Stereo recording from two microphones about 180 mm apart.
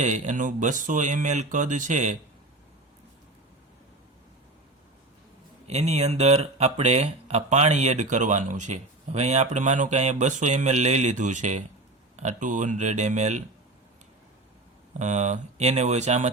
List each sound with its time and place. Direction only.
0.0 s speech: 40° right (ahead or behind)
5.6 s speech: 35° right (ahead or behind)
14.9 s speech: 40° right (ahead or behind)